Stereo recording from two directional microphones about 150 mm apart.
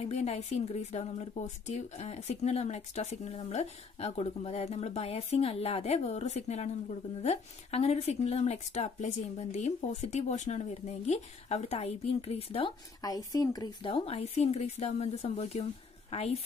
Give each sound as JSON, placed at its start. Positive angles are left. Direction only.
{"t": 0.0, "sound": "speech", "side_deg": 45}
{"t": 13.0, "sound": "speech", "side_deg": 25}
{"t": 13.8, "sound": "a woman's voice", "side_deg": 40}